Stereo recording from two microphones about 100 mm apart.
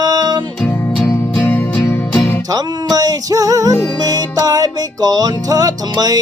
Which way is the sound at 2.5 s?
40° right (ahead or behind).